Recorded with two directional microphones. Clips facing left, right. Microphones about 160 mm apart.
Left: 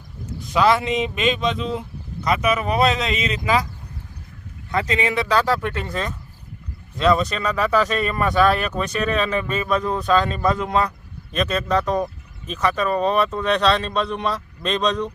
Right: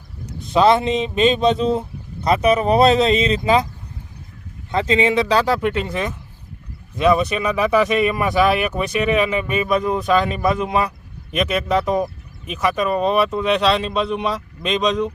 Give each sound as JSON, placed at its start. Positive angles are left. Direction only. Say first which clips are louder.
{"t": 0.5, "sound": "speech", "louder": "right 3 dB", "side_deg": -25}
{"t": 4.7, "sound": "speech", "louder": "right 5 dB", "side_deg": -25}